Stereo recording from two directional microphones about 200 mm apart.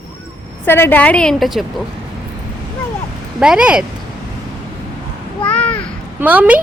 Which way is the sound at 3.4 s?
5° right (ahead or behind).